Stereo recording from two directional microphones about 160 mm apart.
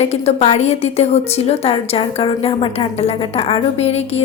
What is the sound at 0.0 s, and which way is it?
A woman's voice, 40° left (ahead or behind).